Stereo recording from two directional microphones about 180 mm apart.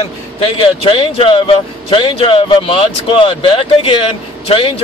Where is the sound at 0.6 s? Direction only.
30° left (ahead or behind).